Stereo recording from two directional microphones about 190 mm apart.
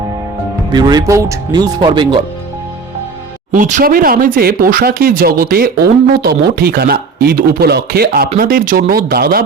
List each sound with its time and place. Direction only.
0.7 s speech: 20° right (ahead or behind)
3.5 s speech: 40° right (ahead or behind)